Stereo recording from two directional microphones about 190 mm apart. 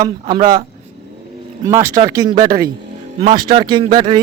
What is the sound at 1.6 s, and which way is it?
Speech, 15° right (ahead or behind).